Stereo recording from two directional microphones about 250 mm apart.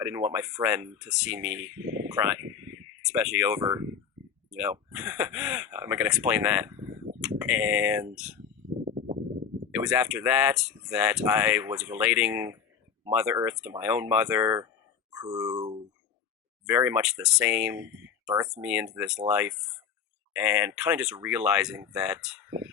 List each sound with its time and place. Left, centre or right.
0.0 s speech: centre
8.8 s horse: right
9.7 s speech: centre
16.6 s speech: centre